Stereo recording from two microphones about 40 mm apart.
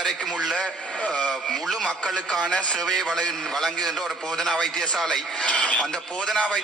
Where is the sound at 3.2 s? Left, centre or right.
Centre.